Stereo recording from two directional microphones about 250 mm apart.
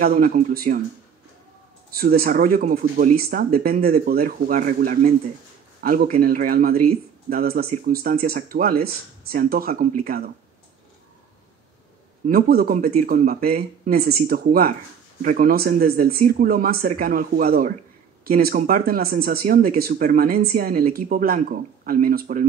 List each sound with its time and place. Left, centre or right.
0.0 s speech: right
1.9 s speech: right
12.3 s speech: right